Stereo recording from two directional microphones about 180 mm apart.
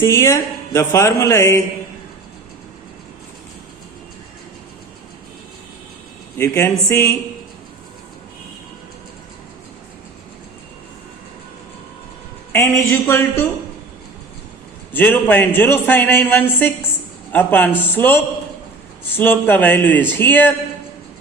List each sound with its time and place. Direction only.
0.0 s a man's voice: 15° left (ahead or behind)
6.3 s a man's voice: 15° left (ahead or behind)
12.5 s a man's voice: 15° left (ahead or behind)
14.9 s a man's voice: 10° left (ahead or behind)